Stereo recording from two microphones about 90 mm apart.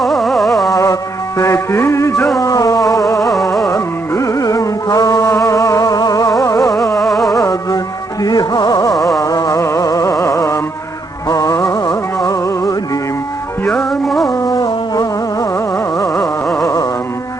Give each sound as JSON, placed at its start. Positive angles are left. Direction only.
{"t": 0.0, "sound": "music", "side_deg": 0}
{"t": 0.7, "sound": "music", "side_deg": 35}
{"t": 6.9, "sound": "music", "side_deg": 0}
{"t": 7.3, "sound": "music", "side_deg": 40}
{"t": 13.7, "sound": "music", "side_deg": 5}
{"t": 14.3, "sound": "music", "side_deg": 40}
{"t": 16.6, "sound": "carnatic music", "side_deg": 40}